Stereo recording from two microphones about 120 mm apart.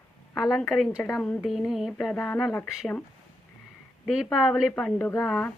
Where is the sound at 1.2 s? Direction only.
10° left (ahead or behind).